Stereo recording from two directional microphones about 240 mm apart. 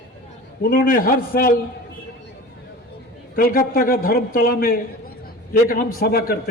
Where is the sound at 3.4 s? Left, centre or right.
Left.